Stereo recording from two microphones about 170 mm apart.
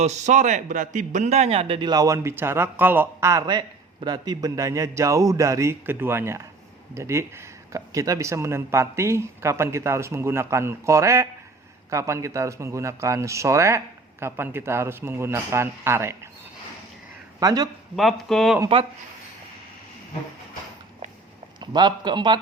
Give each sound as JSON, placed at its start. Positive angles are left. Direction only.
{"t": 0.0, "sound": "a man's voice", "side_deg": -40}
{"t": 17.4, "sound": "speech", "side_deg": -20}
{"t": 17.9, "sound": "speech", "side_deg": 0}
{"t": 21.6, "sound": "speech", "side_deg": -25}